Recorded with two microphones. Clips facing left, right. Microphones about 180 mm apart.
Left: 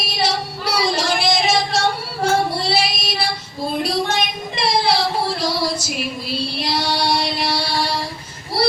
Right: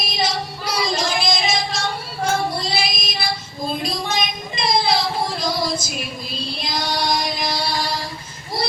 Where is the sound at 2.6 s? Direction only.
65° left (ahead or behind).